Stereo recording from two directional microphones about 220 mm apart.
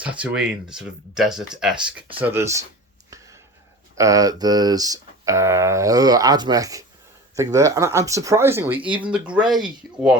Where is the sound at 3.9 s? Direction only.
15° right (ahead or behind).